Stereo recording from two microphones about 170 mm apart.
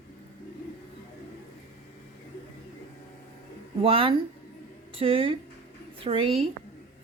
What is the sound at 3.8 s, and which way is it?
A woman's voice, 35° right (ahead or behind).